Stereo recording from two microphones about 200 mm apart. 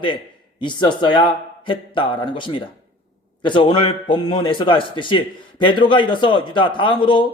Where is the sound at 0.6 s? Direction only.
25° left (ahead or behind).